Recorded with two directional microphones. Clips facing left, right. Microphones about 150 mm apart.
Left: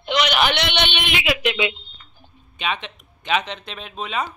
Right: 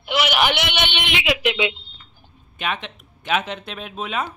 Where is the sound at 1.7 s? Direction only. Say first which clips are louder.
Left 1 dB; 15° left (ahead or behind).